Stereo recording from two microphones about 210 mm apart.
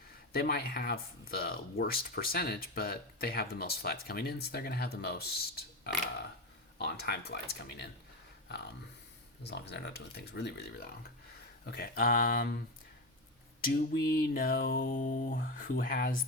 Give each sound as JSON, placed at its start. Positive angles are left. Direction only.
{"t": 0.3, "sound": "speech", "side_deg": 45}
{"t": 13.6, "sound": "a sound", "side_deg": 45}
{"t": 15.8, "sound": "speech", "side_deg": 45}